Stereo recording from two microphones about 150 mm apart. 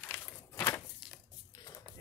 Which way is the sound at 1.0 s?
Centre (ahead or behind).